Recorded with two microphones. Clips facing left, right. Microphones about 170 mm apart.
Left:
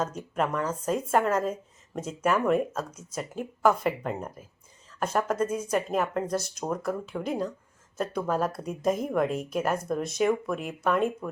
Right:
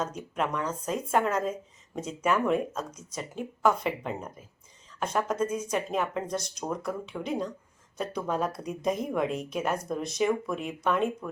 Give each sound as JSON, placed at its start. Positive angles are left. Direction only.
{"t": 0.3, "sound": "a woman's voice", "side_deg": 5}